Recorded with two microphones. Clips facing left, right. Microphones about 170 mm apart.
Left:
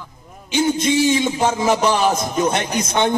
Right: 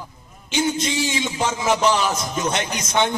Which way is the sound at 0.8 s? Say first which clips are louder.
Left 7 dB; 50° left (ahead or behind).